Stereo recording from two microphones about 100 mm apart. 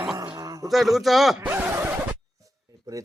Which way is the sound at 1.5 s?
20° right (ahead or behind).